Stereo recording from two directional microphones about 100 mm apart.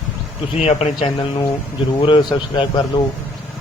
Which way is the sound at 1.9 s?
60° left (ahead or behind).